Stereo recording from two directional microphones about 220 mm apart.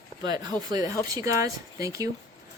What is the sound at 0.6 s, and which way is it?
Speech, 15° right (ahead or behind).